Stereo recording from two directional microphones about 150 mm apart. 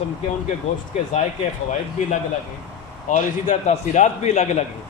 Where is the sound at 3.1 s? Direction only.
50° left (ahead or behind).